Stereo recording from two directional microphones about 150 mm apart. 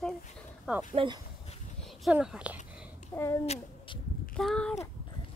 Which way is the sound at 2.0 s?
5° right (ahead or behind).